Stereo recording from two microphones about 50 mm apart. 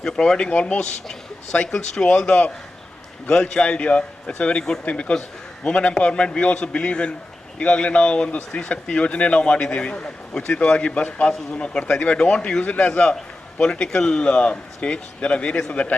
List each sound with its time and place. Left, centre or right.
0.0 s speech: centre
12.6 s speech: left
12.9 s speech: centre